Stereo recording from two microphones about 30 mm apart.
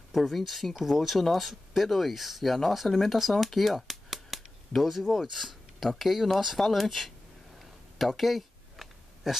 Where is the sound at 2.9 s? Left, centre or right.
Centre.